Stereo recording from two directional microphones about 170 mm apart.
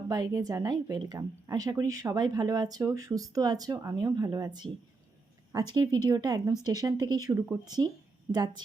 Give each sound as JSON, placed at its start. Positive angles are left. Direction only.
{"t": 0.1, "sound": "a woman's voice", "side_deg": -20}